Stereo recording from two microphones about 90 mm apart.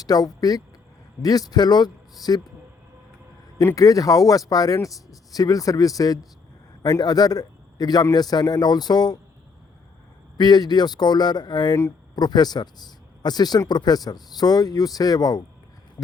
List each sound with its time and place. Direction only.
0.0 s speech: 45° left (ahead or behind)
3.8 s a man's voice: 40° left (ahead or behind)
10.3 s speech: 50° left (ahead or behind)